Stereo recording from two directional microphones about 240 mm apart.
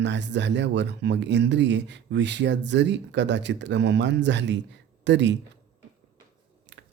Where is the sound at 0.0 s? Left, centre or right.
Right.